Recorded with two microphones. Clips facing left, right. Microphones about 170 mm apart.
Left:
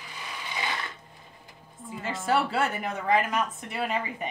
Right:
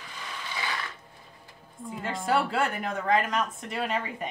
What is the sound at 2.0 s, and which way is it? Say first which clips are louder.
Speech: even; 5° left (ahead or behind).